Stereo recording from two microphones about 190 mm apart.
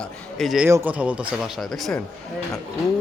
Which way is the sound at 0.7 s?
10° right (ahead or behind).